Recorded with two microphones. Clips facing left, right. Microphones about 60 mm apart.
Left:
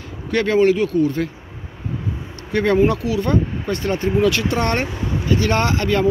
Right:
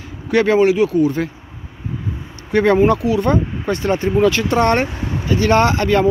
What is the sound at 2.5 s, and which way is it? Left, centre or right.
Speech, right.